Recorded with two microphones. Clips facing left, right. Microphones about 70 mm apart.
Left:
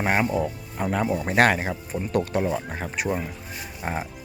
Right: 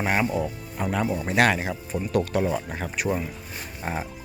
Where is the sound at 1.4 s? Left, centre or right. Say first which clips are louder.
Left 1 dB; left.